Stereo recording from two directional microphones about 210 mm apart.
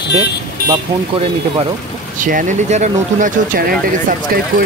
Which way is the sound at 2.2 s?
40° right (ahead or behind).